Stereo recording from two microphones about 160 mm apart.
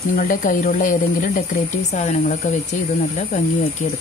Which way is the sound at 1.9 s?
45° left (ahead or behind).